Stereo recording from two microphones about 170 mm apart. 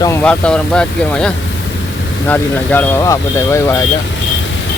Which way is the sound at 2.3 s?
10° left (ahead or behind).